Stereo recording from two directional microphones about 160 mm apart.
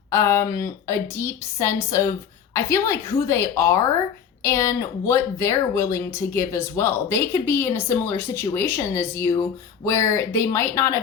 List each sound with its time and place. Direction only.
0.1 s speech: 15° left (ahead or behind)